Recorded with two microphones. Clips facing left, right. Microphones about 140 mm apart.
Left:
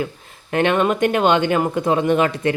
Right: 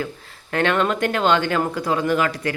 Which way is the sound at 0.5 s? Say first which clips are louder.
Left 3 dB; 20° left (ahead or behind).